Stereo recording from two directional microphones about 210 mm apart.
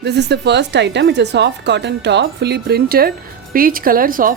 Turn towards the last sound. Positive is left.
turn(degrees=-40)  # may be behind; listen again after turning